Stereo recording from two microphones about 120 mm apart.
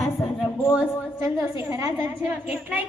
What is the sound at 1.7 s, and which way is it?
Speech, 20° right (ahead or behind).